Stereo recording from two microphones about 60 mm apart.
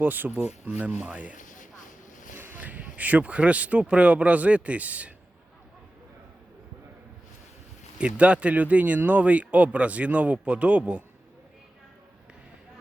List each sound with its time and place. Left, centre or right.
0.0 s speech: right
2.3 s a sound: right
2.6 s speech: right
7.9 s speech: centre